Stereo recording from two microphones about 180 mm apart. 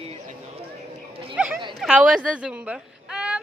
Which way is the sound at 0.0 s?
35° right (ahead or behind).